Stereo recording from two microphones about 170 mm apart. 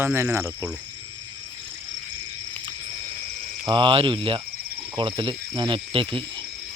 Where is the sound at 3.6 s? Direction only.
30° right (ahead or behind).